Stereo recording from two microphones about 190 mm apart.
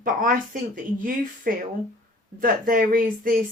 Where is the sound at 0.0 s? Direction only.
45° right (ahead or behind).